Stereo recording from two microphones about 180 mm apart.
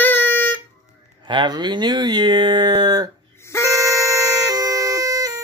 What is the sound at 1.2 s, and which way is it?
Speech, 25° right (ahead or behind).